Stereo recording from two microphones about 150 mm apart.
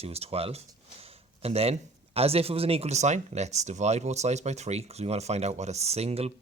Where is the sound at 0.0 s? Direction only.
40° right (ahead or behind).